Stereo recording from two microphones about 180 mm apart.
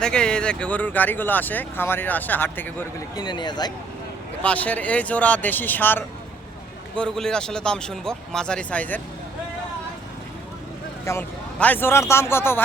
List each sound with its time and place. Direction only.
0.0 s speech: 5° left (ahead or behind)
3.2 s speech: 25° left (ahead or behind)
4.4 s speech: 10° left (ahead or behind)
11.0 s speech: 10° left (ahead or behind)